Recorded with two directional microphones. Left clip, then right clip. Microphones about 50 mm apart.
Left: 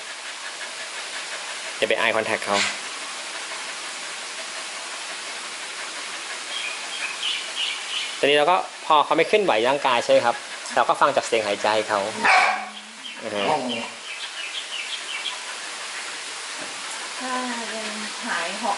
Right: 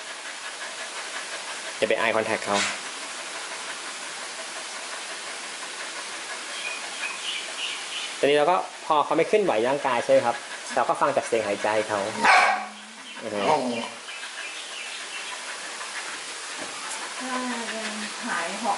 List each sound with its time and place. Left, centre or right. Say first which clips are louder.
1.8 s speech: left 2 dB; centre
8.2 s speech: left 2 dB; centre
10.9 s speech: left 4 dB; right
11.3 s speech: left 3 dB; right